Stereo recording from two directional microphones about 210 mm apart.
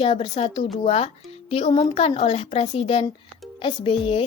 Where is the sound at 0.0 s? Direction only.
25° left (ahead or behind).